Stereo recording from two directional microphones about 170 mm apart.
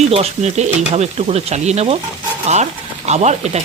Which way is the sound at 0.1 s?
40° right (ahead or behind).